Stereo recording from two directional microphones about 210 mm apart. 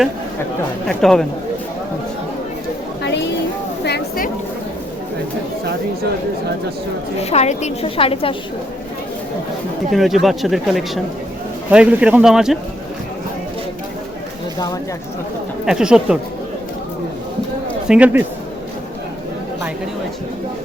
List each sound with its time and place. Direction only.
0.9 s speech: centre (ahead or behind)
3.8 s a sound: 50° left (ahead or behind)
7.2 s a woman's voice: 30° left (ahead or behind)
9.9 s speech: centre (ahead or behind)
15.6 s speech: 5° right (ahead or behind)
17.8 s speech: 5° right (ahead or behind)